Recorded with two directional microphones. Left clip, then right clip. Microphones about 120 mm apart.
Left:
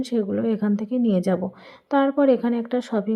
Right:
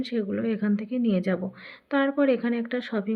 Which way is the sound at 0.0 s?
50° left (ahead or behind).